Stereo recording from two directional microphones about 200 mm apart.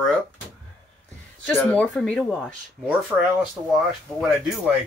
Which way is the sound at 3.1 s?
15° right (ahead or behind).